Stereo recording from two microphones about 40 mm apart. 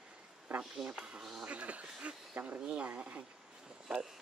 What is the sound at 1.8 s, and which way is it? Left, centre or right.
Speech, right.